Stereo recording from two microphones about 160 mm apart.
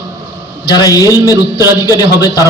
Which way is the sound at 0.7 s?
25° left (ahead or behind).